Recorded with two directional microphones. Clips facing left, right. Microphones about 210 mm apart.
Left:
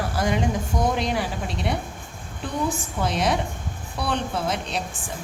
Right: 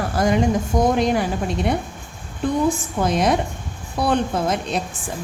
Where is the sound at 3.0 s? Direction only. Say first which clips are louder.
Right 4 dB; 45° right (ahead or behind).